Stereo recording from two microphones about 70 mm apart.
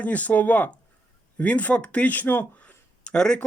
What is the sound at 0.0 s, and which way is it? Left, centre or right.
Speech, left.